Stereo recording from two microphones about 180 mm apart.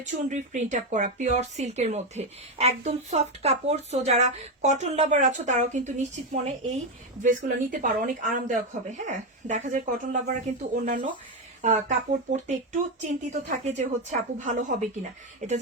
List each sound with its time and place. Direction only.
0.0 s speech: 45° right (ahead or behind)